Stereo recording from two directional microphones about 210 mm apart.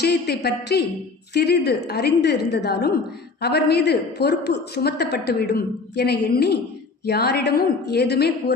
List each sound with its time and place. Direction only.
0.0 s a woman's voice: 50° left (ahead or behind)